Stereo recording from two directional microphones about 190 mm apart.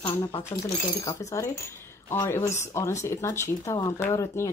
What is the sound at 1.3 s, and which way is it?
Speech, 15° left (ahead or behind).